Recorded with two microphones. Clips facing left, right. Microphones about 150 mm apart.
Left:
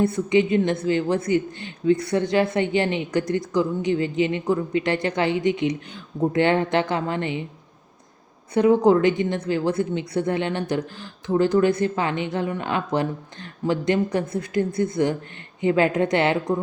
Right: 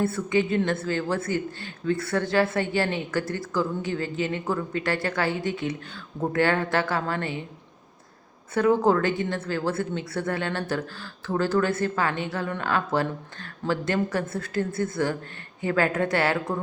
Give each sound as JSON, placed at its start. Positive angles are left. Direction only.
{"t": 0.0, "sound": "a woman's voice", "side_deg": 20}
{"t": 8.5, "sound": "a woman's voice", "side_deg": 15}